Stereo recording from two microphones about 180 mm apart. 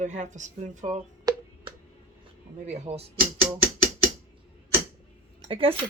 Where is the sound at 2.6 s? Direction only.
35° right (ahead or behind).